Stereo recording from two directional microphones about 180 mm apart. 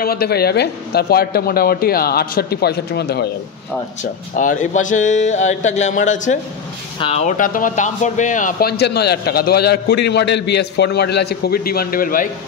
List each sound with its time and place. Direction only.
0.0 s speech: 60° left (ahead or behind)
4.0 s a man's voice: 45° left (ahead or behind)